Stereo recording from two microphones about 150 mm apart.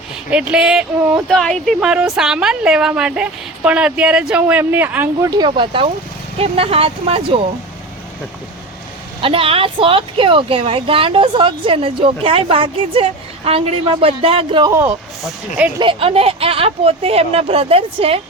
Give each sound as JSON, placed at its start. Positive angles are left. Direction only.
{"t": 0.3, "sound": "speech", "side_deg": -10}
{"t": 5.3, "sound": "speech", "side_deg": -30}
{"t": 9.2, "sound": "speech", "side_deg": -35}
{"t": 14.7, "sound": "speech", "side_deg": -15}
{"t": 15.8, "sound": "speech", "side_deg": -35}